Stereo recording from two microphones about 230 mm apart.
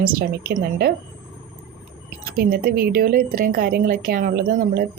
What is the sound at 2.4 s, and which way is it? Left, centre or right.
A woman's voice, right.